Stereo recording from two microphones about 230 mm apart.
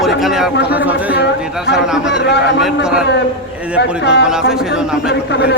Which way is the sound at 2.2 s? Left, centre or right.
Left.